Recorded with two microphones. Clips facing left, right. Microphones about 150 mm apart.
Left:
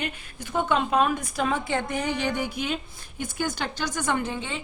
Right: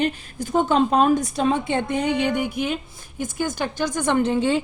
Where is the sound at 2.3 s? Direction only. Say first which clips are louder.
Right 5 dB; 50° right (ahead or behind).